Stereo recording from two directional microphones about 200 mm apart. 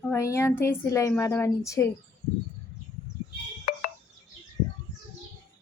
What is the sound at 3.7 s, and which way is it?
Music, 45° left (ahead or behind).